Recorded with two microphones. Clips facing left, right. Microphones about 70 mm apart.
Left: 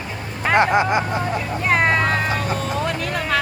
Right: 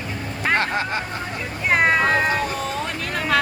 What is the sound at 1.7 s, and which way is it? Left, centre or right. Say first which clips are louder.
Music: right 1 dB; centre.